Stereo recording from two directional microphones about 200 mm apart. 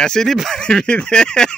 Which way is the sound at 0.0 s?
5° left (ahead or behind).